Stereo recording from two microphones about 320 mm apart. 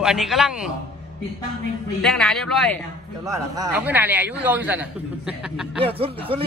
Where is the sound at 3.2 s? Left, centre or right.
Centre.